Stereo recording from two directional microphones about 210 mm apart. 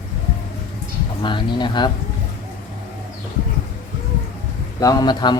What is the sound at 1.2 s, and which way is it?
Speech, 20° left (ahead or behind).